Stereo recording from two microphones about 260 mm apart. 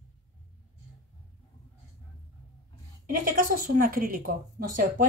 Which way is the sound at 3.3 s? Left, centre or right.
Right.